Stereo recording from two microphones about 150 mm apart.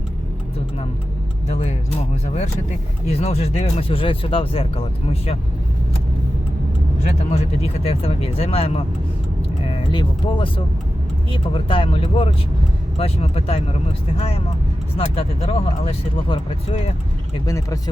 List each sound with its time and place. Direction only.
1.5 s speech: 45° left (ahead or behind)
7.3 s speech: 40° left (ahead or behind)
17.4 s speech: 20° left (ahead or behind)